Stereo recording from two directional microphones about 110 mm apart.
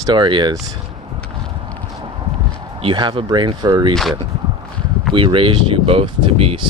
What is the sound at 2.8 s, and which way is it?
Speech, 50° right (ahead or behind).